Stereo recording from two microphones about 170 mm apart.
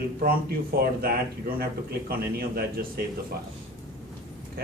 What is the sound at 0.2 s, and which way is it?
Speech, 60° right (ahead or behind).